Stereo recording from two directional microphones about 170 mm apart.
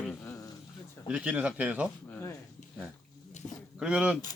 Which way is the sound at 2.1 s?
15° left (ahead or behind).